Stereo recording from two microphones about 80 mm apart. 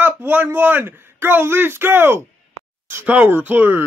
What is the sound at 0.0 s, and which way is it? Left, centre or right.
A child's voice, right.